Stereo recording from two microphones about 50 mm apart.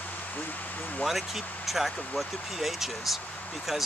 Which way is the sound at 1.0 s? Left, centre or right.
Centre.